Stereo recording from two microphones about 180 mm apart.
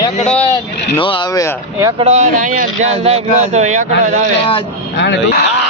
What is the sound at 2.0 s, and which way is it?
Speech, 40° right (ahead or behind).